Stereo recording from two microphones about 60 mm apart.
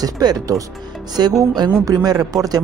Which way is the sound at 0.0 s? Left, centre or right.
Right.